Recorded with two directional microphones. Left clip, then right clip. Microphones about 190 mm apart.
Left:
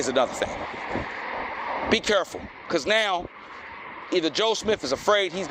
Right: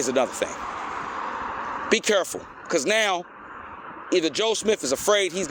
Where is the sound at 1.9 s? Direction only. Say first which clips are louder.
Right 2 dB; 60° right (ahead or behind).